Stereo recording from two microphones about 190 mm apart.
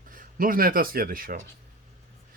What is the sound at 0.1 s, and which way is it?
Speech, 45° right (ahead or behind).